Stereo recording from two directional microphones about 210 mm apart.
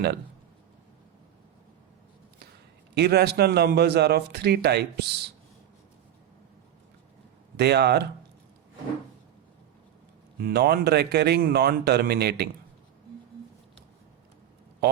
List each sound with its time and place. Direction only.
2.9 s a man's voice: 50° right (ahead or behind)
7.5 s a man's voice: 50° right (ahead or behind)
10.3 s a man's voice: 50° right (ahead or behind)